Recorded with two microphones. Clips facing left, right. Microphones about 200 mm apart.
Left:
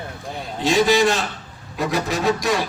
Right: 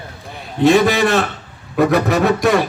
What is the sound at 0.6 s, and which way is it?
A man's voice, 60° right (ahead or behind).